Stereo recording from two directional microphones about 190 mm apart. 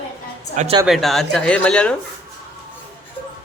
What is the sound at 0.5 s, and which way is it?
Speech, 40° right (ahead or behind).